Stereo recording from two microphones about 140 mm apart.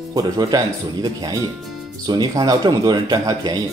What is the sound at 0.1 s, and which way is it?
Speech, 30° right (ahead or behind).